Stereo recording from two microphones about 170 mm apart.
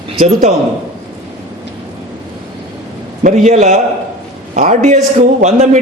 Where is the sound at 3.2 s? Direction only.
45° right (ahead or behind).